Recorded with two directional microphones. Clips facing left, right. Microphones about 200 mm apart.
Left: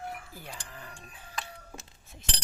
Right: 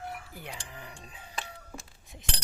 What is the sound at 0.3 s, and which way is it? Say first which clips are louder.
Speech: right 2 dB; 20° right (ahead or behind).